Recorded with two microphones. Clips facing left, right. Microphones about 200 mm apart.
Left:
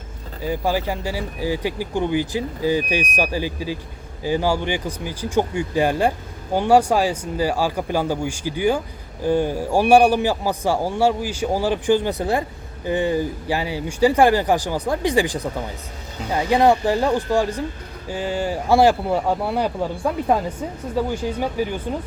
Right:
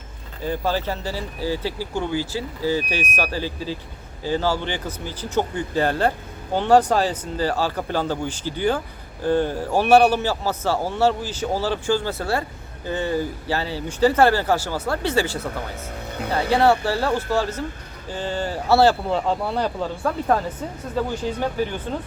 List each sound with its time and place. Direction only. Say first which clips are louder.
0.4 s a man's voice: left 2 dB; 10° left (ahead or behind)